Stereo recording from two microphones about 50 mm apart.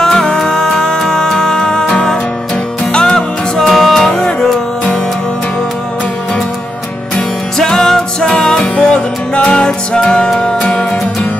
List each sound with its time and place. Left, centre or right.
0.0 s music: centre
3.2 s music: centre
7.5 s music: centre